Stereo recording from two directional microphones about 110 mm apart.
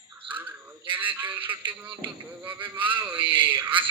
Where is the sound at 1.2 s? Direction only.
15° right (ahead or behind).